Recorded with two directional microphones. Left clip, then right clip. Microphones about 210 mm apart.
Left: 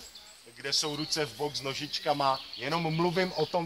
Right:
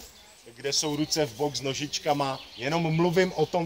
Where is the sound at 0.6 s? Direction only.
30° right (ahead or behind); by 2.0 s 45° right (ahead or behind).